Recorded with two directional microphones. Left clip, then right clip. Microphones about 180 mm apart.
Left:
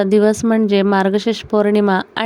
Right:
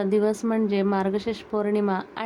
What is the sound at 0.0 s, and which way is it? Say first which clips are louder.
A woman's voice: left 9 dB; 40° left (ahead or behind).